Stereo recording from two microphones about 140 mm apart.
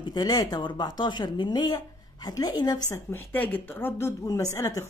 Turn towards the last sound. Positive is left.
turn(degrees=25)  # may be behind; listen again after turning